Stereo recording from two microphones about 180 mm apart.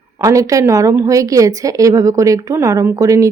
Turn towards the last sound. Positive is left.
turn(degrees=-15)  # may be behind; listen again after turning